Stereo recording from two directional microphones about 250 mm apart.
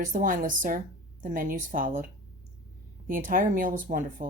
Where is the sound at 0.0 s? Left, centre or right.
Right.